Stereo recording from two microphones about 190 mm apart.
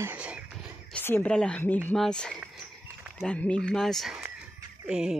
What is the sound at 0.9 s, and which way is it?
Speech, 10° left (ahead or behind).